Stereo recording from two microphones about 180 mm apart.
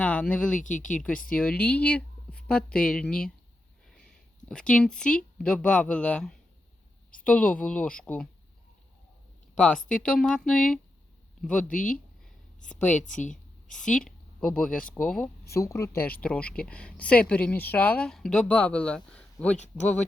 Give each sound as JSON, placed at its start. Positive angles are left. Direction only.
{"t": 0.0, "sound": "speech", "side_deg": 5}
{"t": 0.6, "sound": "speech", "side_deg": 45}
{"t": 0.9, "sound": "speech", "side_deg": 5}
{"t": 4.4, "sound": "speech", "side_deg": 5}
{"t": 9.9, "sound": "speech", "side_deg": 5}
{"t": 13.0, "sound": "a sound", "side_deg": 45}
{"t": 13.7, "sound": "speech", "side_deg": 5}